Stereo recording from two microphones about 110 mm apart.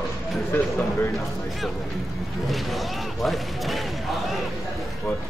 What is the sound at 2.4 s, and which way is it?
Speech, centre (ahead or behind).